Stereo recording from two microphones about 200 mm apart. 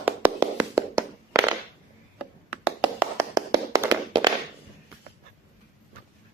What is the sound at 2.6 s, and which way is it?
Tap, 10° right (ahead or behind).